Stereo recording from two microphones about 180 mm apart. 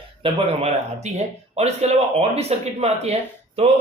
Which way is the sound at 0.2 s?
30° right (ahead or behind).